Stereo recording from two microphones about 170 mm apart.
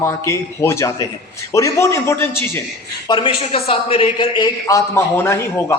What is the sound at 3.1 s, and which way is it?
A man's voice, 30° left (ahead or behind).